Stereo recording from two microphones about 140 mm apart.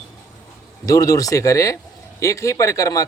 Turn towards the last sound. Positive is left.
turn(degrees=25)  # may be behind; listen again after turning